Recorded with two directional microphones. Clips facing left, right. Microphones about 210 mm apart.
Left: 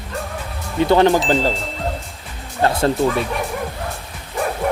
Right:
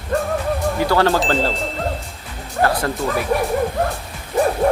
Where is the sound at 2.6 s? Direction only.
25° left (ahead or behind).